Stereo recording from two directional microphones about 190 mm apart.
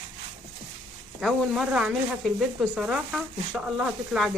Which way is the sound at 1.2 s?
Centre (ahead or behind).